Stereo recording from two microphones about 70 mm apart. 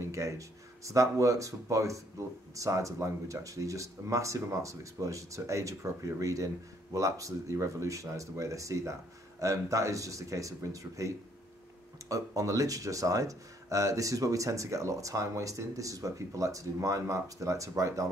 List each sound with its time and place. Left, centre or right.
0.0 s speech: right